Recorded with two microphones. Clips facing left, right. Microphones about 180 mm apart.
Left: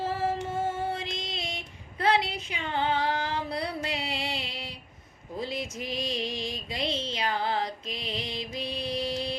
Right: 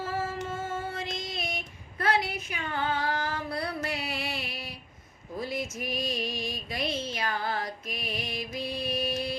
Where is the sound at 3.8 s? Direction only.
20° left (ahead or behind).